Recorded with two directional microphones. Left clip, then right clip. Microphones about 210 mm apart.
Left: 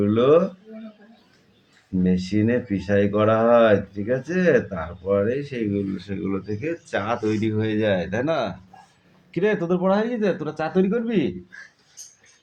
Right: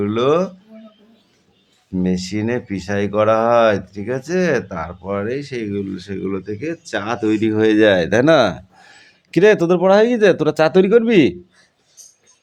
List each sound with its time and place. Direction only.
0.0 s speech: 35° right (ahead or behind)
2.0 s speech: 35° right (ahead or behind); by 11.3 s 55° right (ahead or behind)